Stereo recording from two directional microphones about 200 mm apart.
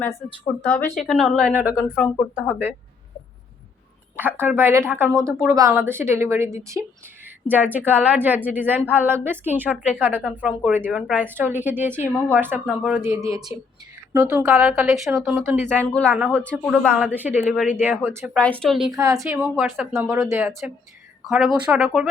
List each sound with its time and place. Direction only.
0.6 s a woman's voice: 5° left (ahead or behind); by 2.7 s 10° right (ahead or behind)
4.2 s a woman's voice: 10° right (ahead or behind)
15.9 s speech: 5° left (ahead or behind)
17.0 s a woman's voice: 10° right (ahead or behind)
18.3 s speech: 5° left (ahead or behind)
18.9 s a woman's voice: 15° right (ahead or behind)
19.3 s a woman's voice: 5° right (ahead or behind)